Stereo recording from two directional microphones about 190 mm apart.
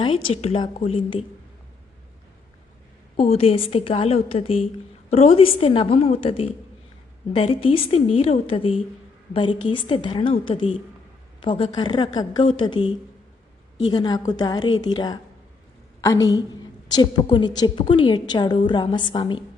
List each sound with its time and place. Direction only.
0.0 s a woman's voice: 30° left (ahead or behind)
3.2 s a woman's voice: 35° left (ahead or behind)